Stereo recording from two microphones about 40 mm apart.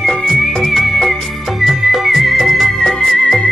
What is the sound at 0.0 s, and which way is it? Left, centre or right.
Music, centre.